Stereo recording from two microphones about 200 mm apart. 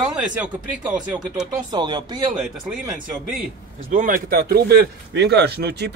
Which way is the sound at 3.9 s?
40° right (ahead or behind).